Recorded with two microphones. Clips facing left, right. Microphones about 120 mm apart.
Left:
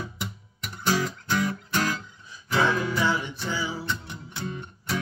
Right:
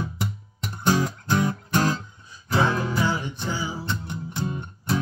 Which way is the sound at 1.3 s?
30° right (ahead or behind).